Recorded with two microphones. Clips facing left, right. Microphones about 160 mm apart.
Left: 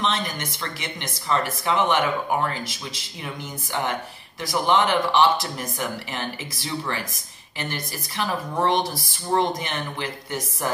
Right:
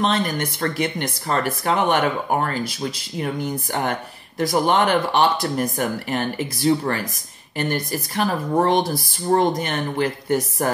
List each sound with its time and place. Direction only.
0.0 s speech: 55° right (ahead or behind)